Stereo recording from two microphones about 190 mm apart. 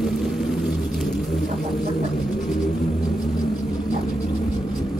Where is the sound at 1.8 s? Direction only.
40° left (ahead or behind).